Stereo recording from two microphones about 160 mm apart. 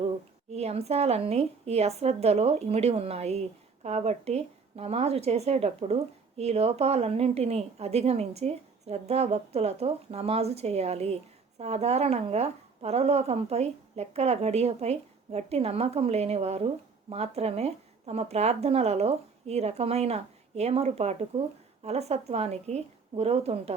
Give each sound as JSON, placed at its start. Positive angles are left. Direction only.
{"t": 0.5, "sound": "a woman's voice", "side_deg": -40}